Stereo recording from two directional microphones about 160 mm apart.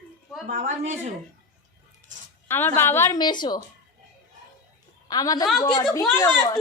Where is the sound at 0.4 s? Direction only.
45° right (ahead or behind).